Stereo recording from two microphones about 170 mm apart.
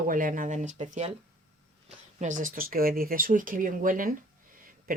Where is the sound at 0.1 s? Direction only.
50° right (ahead or behind).